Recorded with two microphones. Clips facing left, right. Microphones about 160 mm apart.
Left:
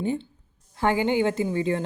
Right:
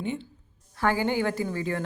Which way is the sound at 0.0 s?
35° left (ahead or behind).